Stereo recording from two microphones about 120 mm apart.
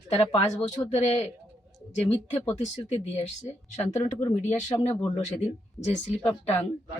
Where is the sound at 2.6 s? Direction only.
60° left (ahead or behind).